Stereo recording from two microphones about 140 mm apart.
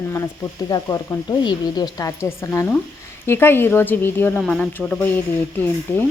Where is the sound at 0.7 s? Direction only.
25° left (ahead or behind).